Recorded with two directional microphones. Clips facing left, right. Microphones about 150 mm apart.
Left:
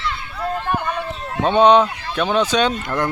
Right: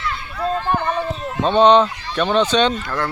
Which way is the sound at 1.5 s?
10° left (ahead or behind).